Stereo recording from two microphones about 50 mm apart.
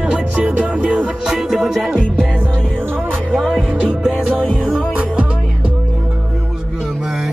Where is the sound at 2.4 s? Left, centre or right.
Right.